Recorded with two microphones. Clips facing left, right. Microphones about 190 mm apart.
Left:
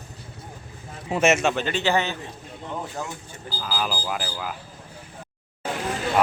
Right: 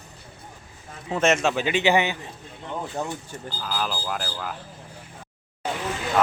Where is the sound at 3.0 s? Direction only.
25° right (ahead or behind).